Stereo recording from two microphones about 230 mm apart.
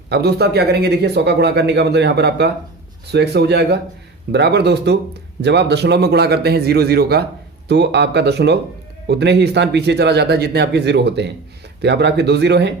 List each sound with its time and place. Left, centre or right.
0.1 s speech: right